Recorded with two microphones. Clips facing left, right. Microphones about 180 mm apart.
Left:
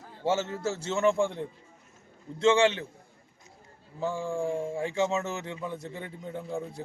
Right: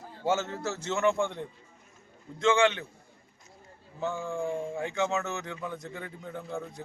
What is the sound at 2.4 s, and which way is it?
Speech, 30° left (ahead or behind).